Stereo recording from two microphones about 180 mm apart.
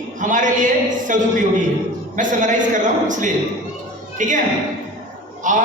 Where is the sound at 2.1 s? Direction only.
45° right (ahead or behind).